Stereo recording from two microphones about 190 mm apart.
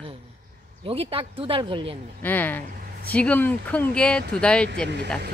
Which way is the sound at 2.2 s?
10° left (ahead or behind).